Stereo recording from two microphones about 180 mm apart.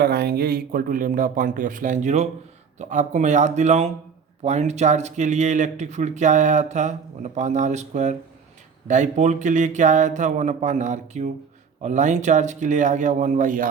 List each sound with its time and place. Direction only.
0.0 s speech: 60° right (ahead or behind)